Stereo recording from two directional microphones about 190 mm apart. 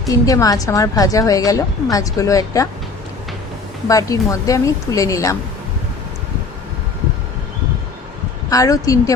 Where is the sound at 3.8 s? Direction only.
20° left (ahead or behind).